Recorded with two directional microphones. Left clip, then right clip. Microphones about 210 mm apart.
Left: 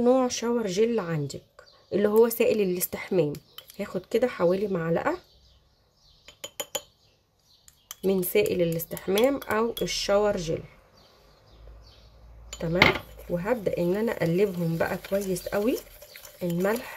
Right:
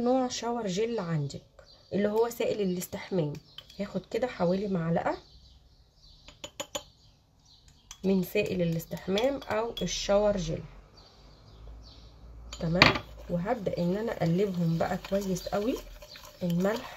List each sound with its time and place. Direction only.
0.0 s speech: 20° left (ahead or behind)
8.0 s speech: 35° left (ahead or behind)
13.3 s speech: 20° left (ahead or behind)